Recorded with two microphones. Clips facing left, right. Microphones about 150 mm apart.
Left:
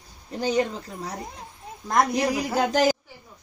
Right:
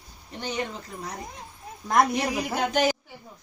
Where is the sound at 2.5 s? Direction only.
40° left (ahead or behind).